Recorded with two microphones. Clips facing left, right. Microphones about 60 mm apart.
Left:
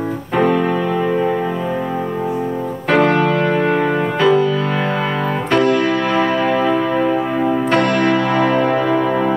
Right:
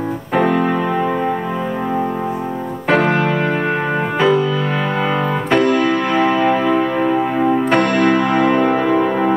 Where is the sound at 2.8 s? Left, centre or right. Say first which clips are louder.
Left 1 dB; centre.